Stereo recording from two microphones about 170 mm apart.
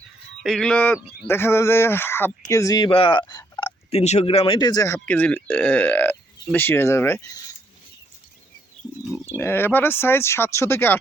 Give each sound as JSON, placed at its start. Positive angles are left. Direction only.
{"t": 0.4, "sound": "speech", "side_deg": 5}
{"t": 3.9, "sound": "speech", "side_deg": 40}
{"t": 4.9, "sound": "speech", "side_deg": 10}
{"t": 9.3, "sound": "speech", "side_deg": 15}